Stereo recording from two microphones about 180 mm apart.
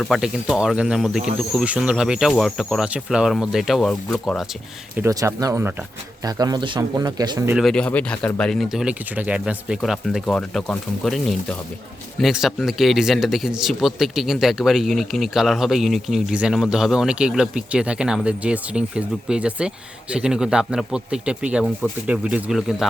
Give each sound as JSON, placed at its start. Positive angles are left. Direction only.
{"t": 0.0, "sound": "speech", "side_deg": 0}
{"t": 4.9, "sound": "speech", "side_deg": -15}
{"t": 7.5, "sound": "speech", "side_deg": 0}